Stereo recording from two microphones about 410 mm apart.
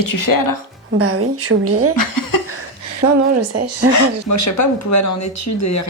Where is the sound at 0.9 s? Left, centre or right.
Right.